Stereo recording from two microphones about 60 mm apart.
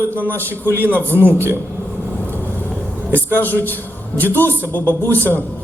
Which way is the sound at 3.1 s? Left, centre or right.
Right.